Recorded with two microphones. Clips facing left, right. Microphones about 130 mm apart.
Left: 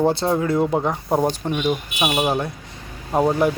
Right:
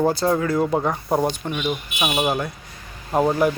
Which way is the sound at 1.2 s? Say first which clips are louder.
Left 2 dB; 35° left (ahead or behind).